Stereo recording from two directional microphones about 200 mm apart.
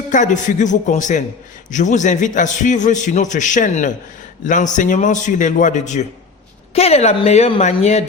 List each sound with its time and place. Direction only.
0.1 s a man's voice: 40° left (ahead or behind)